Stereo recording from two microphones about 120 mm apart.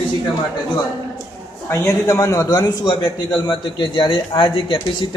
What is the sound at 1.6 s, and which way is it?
A man's voice, 20° left (ahead or behind).